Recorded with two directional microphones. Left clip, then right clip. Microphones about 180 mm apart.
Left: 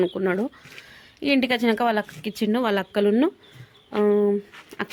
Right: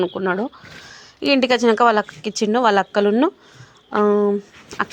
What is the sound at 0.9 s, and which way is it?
Speech, 5° right (ahead or behind).